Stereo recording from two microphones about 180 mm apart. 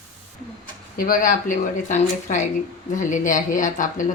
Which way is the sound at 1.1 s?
45° left (ahead or behind).